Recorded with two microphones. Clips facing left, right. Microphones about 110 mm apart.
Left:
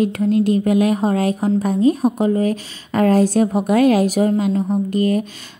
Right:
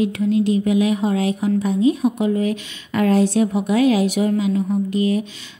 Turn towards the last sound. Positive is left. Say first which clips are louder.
# left 2 dB
turn(degrees=45)  # may be behind; listen again after turning